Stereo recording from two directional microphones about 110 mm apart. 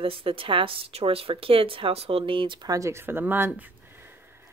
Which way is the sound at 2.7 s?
25° right (ahead or behind).